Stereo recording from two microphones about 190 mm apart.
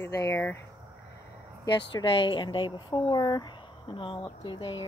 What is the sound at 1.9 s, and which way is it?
Speech, 25° left (ahead or behind).